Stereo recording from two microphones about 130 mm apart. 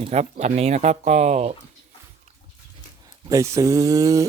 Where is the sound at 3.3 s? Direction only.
25° right (ahead or behind).